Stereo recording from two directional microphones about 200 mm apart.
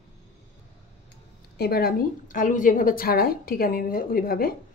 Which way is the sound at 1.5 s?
50° left (ahead or behind).